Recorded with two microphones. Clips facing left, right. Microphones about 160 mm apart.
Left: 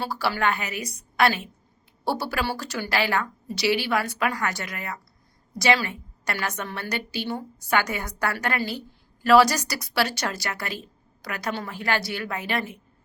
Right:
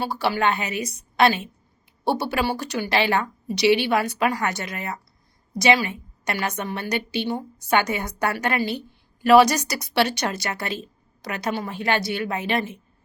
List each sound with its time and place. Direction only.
0.0 s a woman's voice: 20° right (ahead or behind)